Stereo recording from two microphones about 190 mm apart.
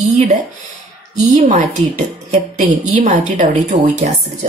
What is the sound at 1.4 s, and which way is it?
A woman's voice, 40° right (ahead or behind).